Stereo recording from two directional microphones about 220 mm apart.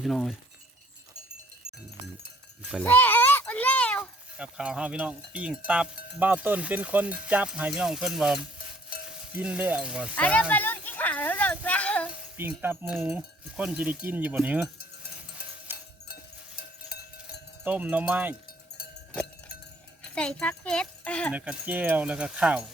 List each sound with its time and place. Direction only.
0.0 s speech: centre (ahead or behind)
2.8 s a sound: 10° left (ahead or behind)
4.4 s speech: 5° right (ahead or behind)
10.2 s speech: 5° left (ahead or behind)
10.5 s a sound: 10° left (ahead or behind)
12.4 s speech: 10° right (ahead or behind)
16.6 s a sound: 45° left (ahead or behind)
17.6 s speech: 5° right (ahead or behind)
20.1 s speech: 5° left (ahead or behind)
21.3 s speech: 5° right (ahead or behind)